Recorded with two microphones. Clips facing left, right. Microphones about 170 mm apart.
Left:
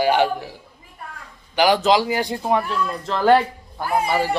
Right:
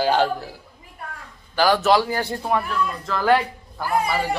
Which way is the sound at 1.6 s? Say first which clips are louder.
Left 1 dB; 15° left (ahead or behind).